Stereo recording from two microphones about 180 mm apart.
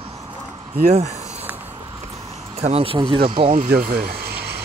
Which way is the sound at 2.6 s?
35° right (ahead or behind).